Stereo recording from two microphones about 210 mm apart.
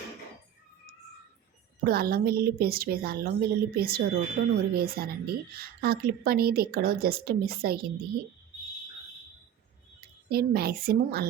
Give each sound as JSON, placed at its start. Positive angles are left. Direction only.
{"t": 1.8, "sound": "a woman's voice", "side_deg": -45}
{"t": 10.2, "sound": "a woman's voice", "side_deg": -45}